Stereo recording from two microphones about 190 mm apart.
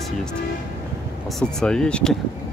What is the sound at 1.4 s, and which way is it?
Speech, 5° left (ahead or behind).